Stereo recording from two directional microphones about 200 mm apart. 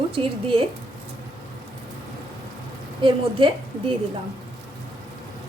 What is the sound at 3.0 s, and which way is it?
Speech, 25° right (ahead or behind).